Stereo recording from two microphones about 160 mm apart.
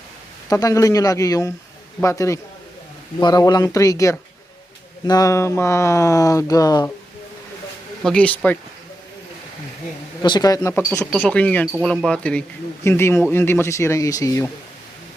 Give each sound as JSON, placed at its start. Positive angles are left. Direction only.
{"t": 0.5, "sound": "speech", "side_deg": 20}
{"t": 8.0, "sound": "speech", "side_deg": 5}
{"t": 10.2, "sound": "speech", "side_deg": 25}